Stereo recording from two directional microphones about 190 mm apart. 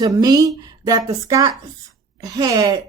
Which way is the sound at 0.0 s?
20° right (ahead or behind).